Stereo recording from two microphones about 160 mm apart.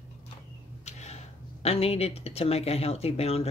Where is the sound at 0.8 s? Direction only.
45° left (ahead or behind).